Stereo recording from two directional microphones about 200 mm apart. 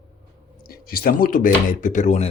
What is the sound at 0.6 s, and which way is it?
Speech, 50° left (ahead or behind).